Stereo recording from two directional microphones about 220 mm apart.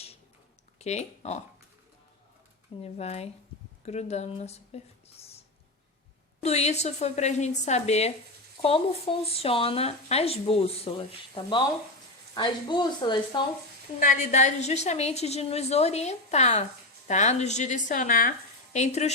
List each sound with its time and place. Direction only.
0.8 s speech: 30° left (ahead or behind)
2.8 s speech: 30° left (ahead or behind)
6.4 s speech: 30° left (ahead or behind)
14.0 s a woman's voice: 35° left (ahead or behind)